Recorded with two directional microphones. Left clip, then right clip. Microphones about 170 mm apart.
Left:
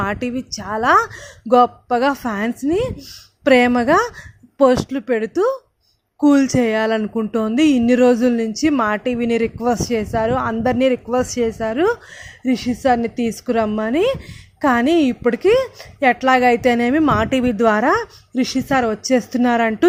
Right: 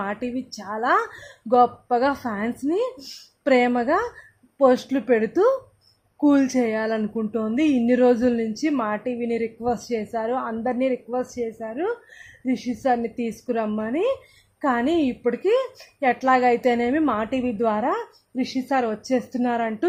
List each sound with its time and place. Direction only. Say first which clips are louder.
0.0 s speech: left 6 dB; 25° left (ahead or behind)
12.5 s speech: left 6 dB; 20° left (ahead or behind)